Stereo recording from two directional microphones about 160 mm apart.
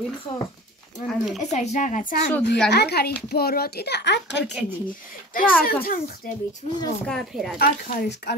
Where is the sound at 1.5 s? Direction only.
45° left (ahead or behind).